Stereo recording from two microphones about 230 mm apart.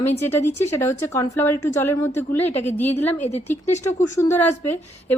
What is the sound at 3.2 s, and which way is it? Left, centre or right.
Speech, left.